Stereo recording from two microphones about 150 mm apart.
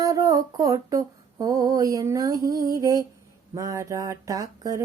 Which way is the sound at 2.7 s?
25° right (ahead or behind).